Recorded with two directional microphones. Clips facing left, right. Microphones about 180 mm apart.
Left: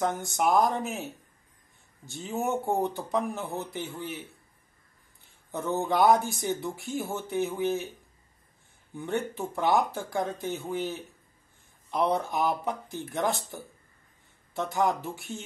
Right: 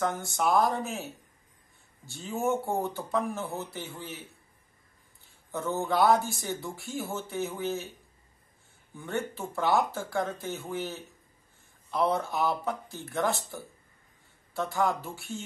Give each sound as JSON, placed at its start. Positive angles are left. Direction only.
{"t": 0.0, "sound": "speech", "side_deg": 15}
{"t": 5.5, "sound": "speech", "side_deg": 15}
{"t": 8.9, "sound": "speech", "side_deg": 20}